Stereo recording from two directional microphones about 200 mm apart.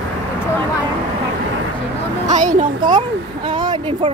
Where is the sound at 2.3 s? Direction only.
40° right (ahead or behind).